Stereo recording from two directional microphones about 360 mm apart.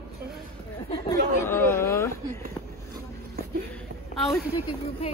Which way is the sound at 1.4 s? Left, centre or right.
Centre.